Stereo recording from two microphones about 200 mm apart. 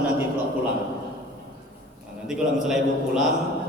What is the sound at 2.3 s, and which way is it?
Speech, centre (ahead or behind).